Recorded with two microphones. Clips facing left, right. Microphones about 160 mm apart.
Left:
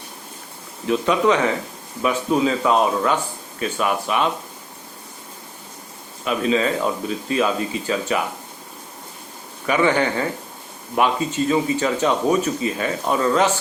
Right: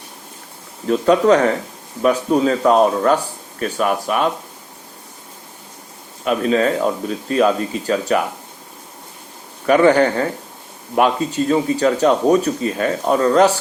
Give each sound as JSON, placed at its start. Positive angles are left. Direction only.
{"t": 0.9, "sound": "a man's voice", "side_deg": -40}
{"t": 6.2, "sound": "speech", "side_deg": -50}
{"t": 9.6, "sound": "speech", "side_deg": -45}
{"t": 11.3, "sound": "speech", "side_deg": -45}